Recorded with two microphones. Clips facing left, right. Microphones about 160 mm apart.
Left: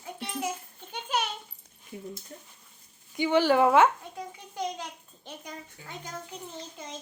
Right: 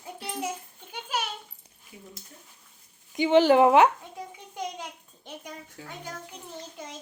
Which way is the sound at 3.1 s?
20° right (ahead or behind).